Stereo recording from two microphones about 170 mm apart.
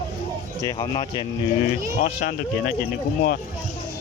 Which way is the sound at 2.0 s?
55° left (ahead or behind).